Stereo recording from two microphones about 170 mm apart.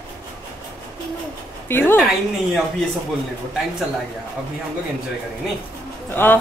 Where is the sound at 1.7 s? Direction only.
10° left (ahead or behind).